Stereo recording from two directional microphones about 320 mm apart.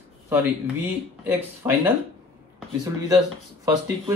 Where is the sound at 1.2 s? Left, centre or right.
Centre.